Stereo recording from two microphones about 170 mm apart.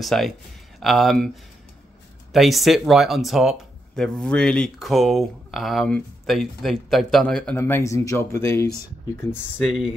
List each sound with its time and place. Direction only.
0.0 s speech: centre (ahead or behind)
9.3 s speech: centre (ahead or behind)